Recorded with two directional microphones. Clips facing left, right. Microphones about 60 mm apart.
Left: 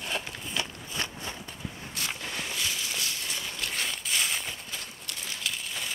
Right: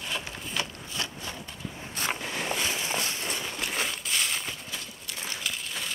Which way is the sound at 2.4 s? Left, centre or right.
Right.